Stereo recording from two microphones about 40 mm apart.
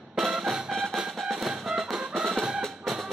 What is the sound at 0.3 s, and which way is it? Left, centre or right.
Music, centre.